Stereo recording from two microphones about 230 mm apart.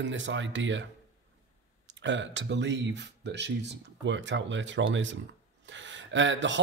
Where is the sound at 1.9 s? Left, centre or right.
Right.